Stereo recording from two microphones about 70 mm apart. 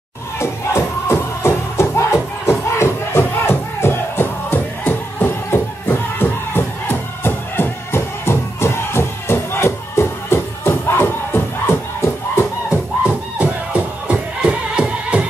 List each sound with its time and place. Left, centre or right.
0.4 s music: left
12.6 s music: centre